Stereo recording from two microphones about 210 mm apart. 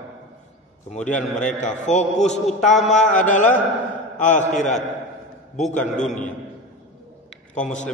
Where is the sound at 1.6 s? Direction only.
35° left (ahead or behind).